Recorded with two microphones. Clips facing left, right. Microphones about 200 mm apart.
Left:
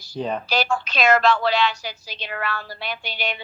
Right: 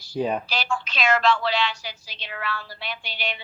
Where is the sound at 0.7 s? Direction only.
40° left (ahead or behind).